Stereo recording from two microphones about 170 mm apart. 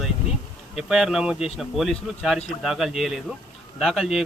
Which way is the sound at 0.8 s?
5° right (ahead or behind).